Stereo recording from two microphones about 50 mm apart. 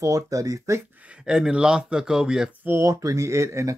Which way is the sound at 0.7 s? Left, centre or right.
Right.